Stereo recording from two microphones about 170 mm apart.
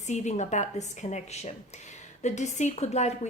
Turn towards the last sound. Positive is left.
turn(degrees=40)  # may be behind; listen again after turning